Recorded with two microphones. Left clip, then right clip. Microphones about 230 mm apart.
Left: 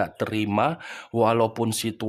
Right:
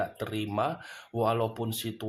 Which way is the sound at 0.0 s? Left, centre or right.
Left.